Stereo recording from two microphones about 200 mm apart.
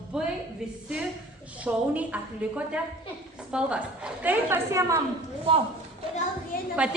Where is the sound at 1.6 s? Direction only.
5° right (ahead or behind).